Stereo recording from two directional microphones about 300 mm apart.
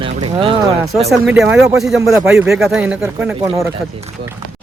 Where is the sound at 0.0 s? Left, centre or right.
Centre.